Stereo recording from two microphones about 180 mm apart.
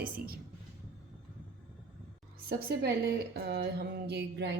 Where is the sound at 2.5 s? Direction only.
60° right (ahead or behind).